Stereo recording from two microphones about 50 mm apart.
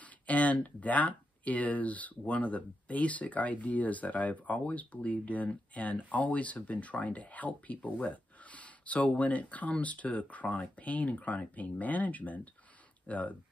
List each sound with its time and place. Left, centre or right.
0.0 s speech: left